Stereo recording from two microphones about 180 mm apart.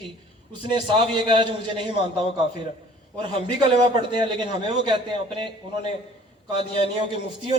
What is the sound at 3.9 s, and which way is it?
A man's voice, 25° right (ahead or behind).